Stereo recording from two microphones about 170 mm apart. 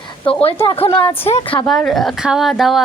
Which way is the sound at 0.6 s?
30° left (ahead or behind).